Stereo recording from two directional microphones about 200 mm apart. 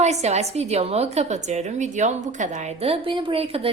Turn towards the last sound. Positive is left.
turn(degrees=-30)  # may be behind; listen again after turning